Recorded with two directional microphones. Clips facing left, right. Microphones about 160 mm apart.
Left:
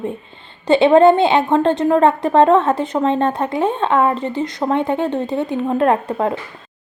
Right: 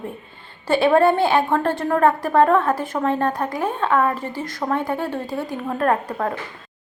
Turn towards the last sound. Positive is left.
turn(degrees=25)  # may be behind; listen again after turning